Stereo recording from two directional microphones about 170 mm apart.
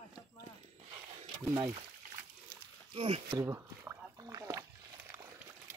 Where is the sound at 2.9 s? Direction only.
35° right (ahead or behind).